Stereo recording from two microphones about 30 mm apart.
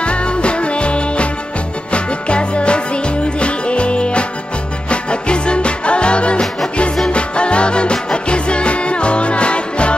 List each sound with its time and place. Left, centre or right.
0.0 s music: left